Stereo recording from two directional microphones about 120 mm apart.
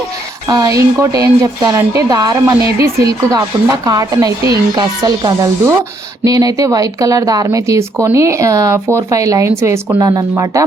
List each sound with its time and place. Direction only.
0.4 s speech: 30° right (ahead or behind)